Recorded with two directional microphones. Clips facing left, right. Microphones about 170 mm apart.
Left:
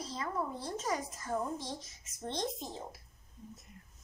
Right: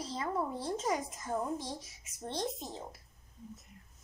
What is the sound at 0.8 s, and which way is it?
Speech, 20° right (ahead or behind).